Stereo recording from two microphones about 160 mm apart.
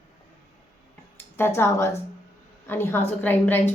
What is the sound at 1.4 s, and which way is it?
A woman's voice, 15° left (ahead or behind).